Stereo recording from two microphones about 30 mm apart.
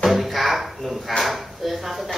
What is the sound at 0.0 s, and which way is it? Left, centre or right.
Drawer open or close, centre.